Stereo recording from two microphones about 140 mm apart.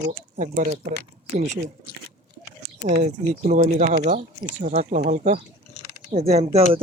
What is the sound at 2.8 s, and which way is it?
Speech, 50° right (ahead or behind).